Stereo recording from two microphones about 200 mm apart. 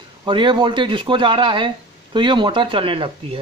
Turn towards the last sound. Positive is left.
turn(degrees=-25)  # may be behind; listen again after turning